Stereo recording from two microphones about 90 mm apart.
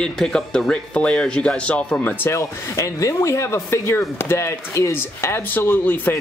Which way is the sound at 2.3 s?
35° left (ahead or behind).